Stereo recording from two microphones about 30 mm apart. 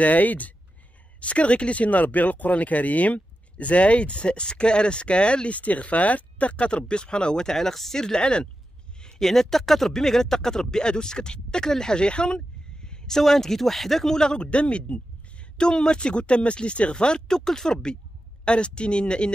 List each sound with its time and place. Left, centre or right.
0.0 s speech: left
1.2 s speech: left
5.6 s speech: left
6.9 s speech: left
7.4 s speech: centre
8.0 s speech: left
9.2 s speech: centre; by 11.7 s left
11.7 s a sound: left
13.1 s speech: centre
14.1 s speech: left
14.5 s speech: left
15.5 s speech: left
16.9 s speech: left
18.4 s speech: left